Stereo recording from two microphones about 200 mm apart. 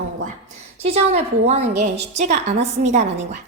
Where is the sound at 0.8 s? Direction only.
30° right (ahead or behind).